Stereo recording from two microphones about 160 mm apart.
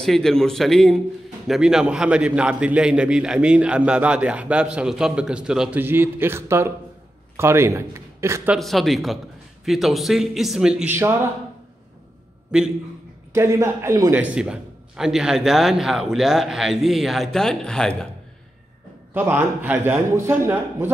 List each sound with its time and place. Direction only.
0.0 s a man's voice: 5° left (ahead or behind); by 8.5 s 15° right (ahead or behind)
8.5 s a man's voice: centre (ahead or behind)
12.4 s a man's voice: 5° right (ahead or behind)
13.3 s a man's voice: 20° right (ahead or behind)
14.2 s a man's voice: 5° right (ahead or behind)
19.1 s a man's voice: 10° right (ahead or behind)